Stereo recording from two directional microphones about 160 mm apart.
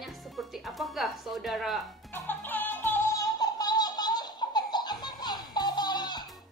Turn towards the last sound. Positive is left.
turn(degrees=25)  # may be behind; listen again after turning